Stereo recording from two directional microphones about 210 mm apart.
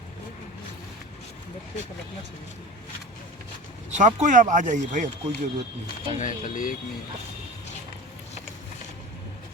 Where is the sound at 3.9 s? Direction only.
35° right (ahead or behind).